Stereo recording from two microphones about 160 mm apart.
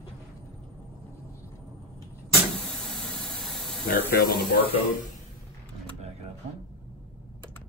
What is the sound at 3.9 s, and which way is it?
Speech, 70° left (ahead or behind).